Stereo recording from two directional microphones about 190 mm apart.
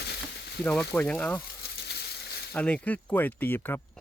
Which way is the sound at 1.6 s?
60° left (ahead or behind).